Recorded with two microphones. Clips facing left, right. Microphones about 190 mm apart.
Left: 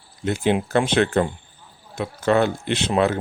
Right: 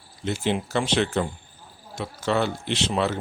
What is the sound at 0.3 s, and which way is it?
Speech, 55° left (ahead or behind).